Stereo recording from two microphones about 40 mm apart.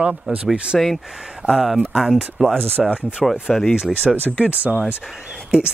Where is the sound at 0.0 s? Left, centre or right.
Right.